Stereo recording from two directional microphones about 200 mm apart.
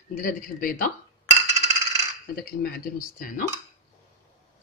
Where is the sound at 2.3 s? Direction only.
50° left (ahead or behind).